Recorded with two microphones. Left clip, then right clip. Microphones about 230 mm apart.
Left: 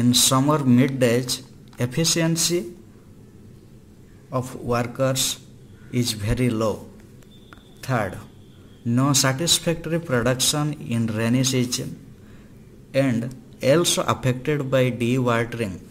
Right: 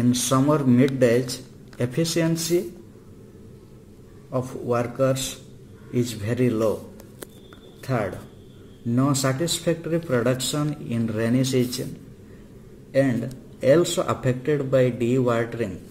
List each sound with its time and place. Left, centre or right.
0.0 s speech: left
4.3 s speech: left
7.8 s speech: left
13.6 s speech: left